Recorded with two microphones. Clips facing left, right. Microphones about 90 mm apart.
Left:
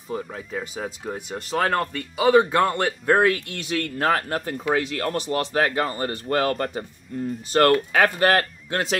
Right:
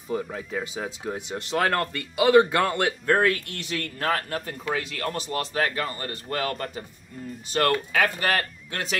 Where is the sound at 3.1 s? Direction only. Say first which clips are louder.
Left 3 dB; 20° left (ahead or behind).